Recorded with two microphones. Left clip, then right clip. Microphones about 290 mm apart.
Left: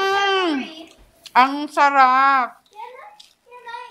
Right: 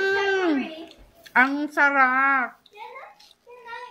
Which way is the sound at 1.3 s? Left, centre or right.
Left.